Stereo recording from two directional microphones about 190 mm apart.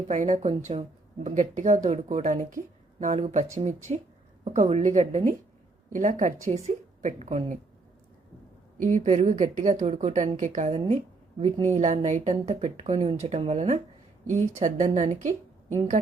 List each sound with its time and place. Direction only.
0.1 s speech: 40° right (ahead or behind)
8.8 s speech: 40° right (ahead or behind)